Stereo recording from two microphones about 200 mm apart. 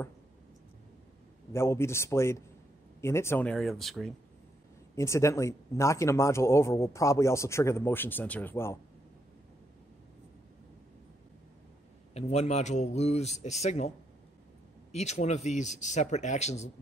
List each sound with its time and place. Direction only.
1.5 s speech: 15° left (ahead or behind)
4.9 s speech: 15° left (ahead or behind)
12.1 s speech: 30° left (ahead or behind)